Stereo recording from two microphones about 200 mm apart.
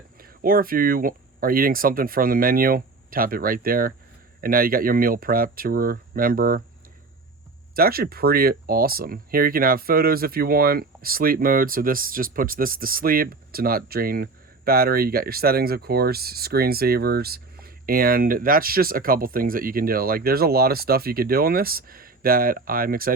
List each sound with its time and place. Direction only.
0.2 s speech: 45° right (ahead or behind)
7.8 s speech: 50° right (ahead or behind)